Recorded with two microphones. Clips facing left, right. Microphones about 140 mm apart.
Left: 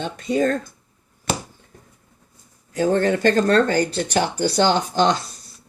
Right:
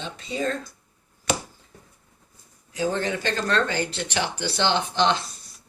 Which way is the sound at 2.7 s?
50° left (ahead or behind).